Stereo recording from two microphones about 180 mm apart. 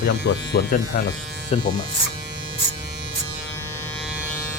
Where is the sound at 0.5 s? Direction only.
55° left (ahead or behind).